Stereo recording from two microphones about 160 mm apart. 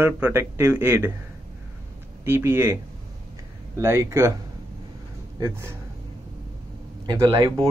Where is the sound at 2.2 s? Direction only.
15° right (ahead or behind).